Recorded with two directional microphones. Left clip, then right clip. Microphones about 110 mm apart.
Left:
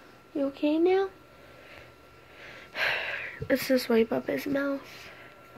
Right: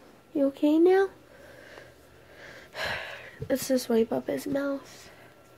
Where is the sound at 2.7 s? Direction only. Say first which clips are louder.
Left 4 dB; 30° right (ahead or behind).